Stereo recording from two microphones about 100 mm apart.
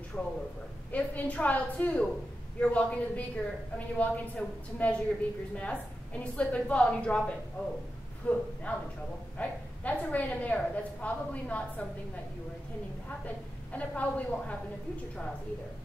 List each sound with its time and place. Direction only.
0.1 s a woman's voice: 10° left (ahead or behind)
13.7 s a woman's voice: 15° left (ahead or behind)